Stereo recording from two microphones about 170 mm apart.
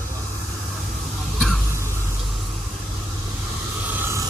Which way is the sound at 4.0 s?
15° right (ahead or behind).